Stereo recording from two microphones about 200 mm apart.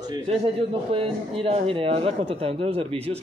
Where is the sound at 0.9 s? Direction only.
25° right (ahead or behind).